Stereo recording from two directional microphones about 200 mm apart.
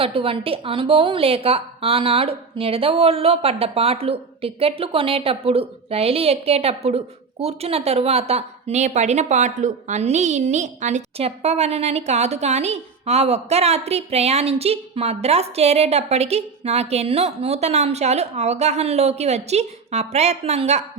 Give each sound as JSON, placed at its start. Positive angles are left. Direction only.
{"t": 0.0, "sound": "a woman's voice", "side_deg": -25}